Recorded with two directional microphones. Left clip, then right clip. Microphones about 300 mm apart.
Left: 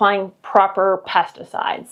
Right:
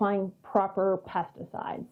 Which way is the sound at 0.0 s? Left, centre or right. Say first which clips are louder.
Left 12 dB; centre.